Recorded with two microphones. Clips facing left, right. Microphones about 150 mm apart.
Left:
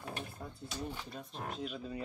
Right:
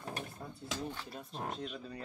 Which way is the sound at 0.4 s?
5° right (ahead or behind).